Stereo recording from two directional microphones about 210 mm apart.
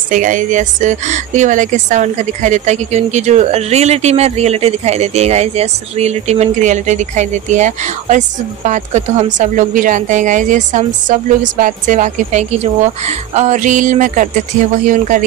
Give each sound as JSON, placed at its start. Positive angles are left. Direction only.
{"t": 0.1, "sound": "speech", "side_deg": -35}